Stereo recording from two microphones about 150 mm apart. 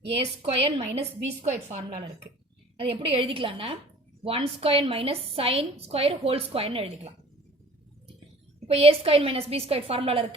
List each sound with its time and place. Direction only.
0.4 s a woman's voice: 45° right (ahead or behind)
2.7 s a woman's voice: 40° right (ahead or behind)
8.6 s a woman's voice: 40° right (ahead or behind)